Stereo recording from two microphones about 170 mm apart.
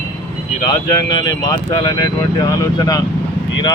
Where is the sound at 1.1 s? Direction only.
25° left (ahead or behind).